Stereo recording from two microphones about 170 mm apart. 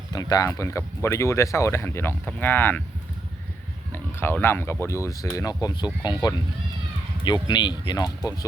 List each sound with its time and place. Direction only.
0.1 s speech: 20° left (ahead or behind)
3.9 s speech: 10° left (ahead or behind)
7.4 s speech: 25° left (ahead or behind)